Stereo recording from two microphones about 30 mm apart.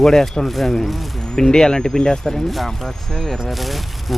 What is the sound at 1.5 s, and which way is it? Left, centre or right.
Speech, left.